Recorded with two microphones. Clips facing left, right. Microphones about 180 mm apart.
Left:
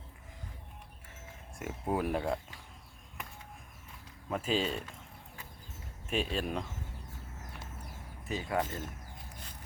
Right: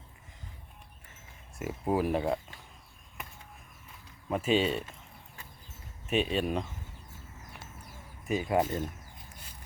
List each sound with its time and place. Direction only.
1.5 s speech: 5° right (ahead or behind)
4.3 s speech: 5° right (ahead or behind)
6.1 s speech: 5° right (ahead or behind)
8.3 s speech: 20° right (ahead or behind)